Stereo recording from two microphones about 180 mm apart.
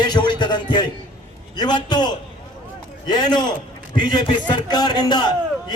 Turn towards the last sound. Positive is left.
turn(degrees=25)  # may be behind; listen again after turning